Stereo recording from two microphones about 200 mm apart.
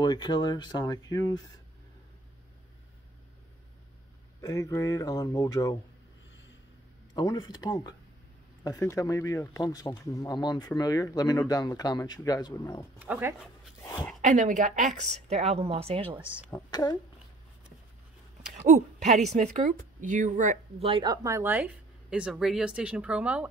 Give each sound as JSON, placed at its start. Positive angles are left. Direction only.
{"t": 0.0, "sound": "speech", "side_deg": 20}
{"t": 4.4, "sound": "speech", "side_deg": 15}
{"t": 7.2, "sound": "speech", "side_deg": 20}
{"t": 13.0, "sound": "speech", "side_deg": -10}
{"t": 14.2, "sound": "speech", "side_deg": -40}
{"t": 18.7, "sound": "speech", "side_deg": -35}
{"t": 20.9, "sound": "a woman's voice", "side_deg": -20}